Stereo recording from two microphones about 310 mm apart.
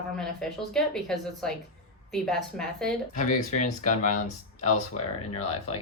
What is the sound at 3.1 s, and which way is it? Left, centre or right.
Speech, left.